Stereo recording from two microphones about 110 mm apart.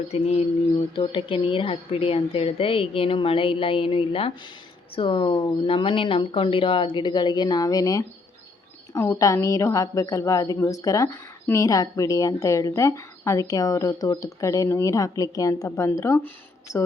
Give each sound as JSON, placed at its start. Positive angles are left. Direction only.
{"t": 0.1, "sound": "speech", "side_deg": 75}
{"t": 0.9, "sound": "a woman's voice", "side_deg": 50}
{"t": 9.1, "sound": "a woman's voice", "side_deg": 30}